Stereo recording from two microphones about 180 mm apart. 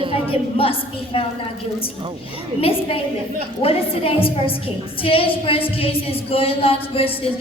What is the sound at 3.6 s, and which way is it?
A woman's voice, 30° left (ahead or behind).